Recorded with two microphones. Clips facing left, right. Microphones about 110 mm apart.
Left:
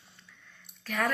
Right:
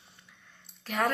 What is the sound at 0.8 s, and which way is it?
Speech, 25° right (ahead or behind).